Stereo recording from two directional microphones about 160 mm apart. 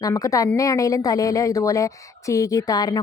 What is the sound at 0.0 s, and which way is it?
Speech, 20° left (ahead or behind).